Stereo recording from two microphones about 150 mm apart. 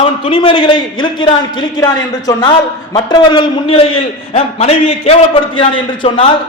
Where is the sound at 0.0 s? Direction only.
35° left (ahead or behind).